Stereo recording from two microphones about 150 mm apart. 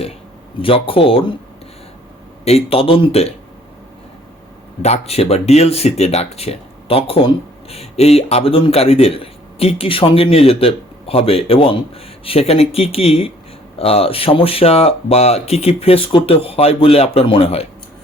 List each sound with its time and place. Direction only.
0.6 s speech: 35° left (ahead or behind)
2.4 s speech: 45° left (ahead or behind)
4.8 s speech: 45° left (ahead or behind)